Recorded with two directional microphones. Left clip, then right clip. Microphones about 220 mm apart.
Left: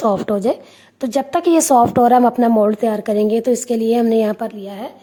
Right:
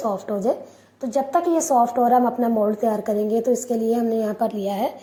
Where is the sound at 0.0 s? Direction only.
30° left (ahead or behind).